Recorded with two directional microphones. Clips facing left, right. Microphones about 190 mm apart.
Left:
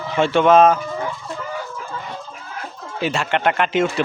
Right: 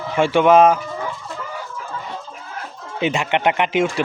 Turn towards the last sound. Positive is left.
turn(degrees=-15)  # may be behind; listen again after turning